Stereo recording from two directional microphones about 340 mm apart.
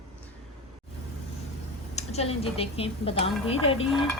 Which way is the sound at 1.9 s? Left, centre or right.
Centre.